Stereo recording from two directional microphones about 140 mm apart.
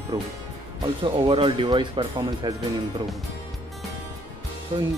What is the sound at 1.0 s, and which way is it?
Speech, 40° right (ahead or behind).